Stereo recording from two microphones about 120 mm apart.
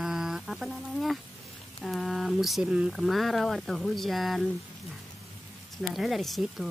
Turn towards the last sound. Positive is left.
turn(degrees=0)  # may be behind; listen again after turning